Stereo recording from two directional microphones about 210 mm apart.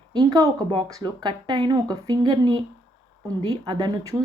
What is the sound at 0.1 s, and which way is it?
A woman's voice, 20° right (ahead or behind).